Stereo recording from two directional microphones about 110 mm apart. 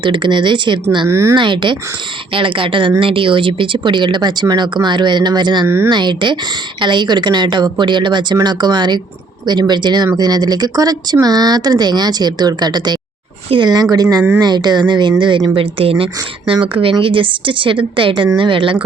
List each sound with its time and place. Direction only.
0.0 s speech: 45° right (ahead or behind)
1.0 s a woman's voice: 25° right (ahead or behind)
1.4 s speech: 45° right (ahead or behind)
5.6 s a woman's voice: 20° right (ahead or behind)
5.9 s speech: 45° right (ahead or behind)
15.5 s speech: 60° right (ahead or behind)